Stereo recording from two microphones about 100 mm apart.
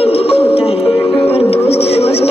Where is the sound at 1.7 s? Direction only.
90° left.